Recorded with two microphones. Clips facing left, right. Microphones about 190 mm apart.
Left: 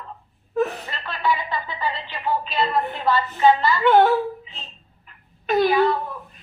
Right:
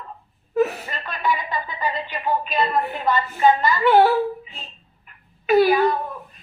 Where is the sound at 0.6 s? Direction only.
10° right (ahead or behind).